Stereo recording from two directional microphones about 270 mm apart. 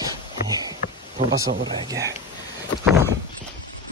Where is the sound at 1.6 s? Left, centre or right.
Centre.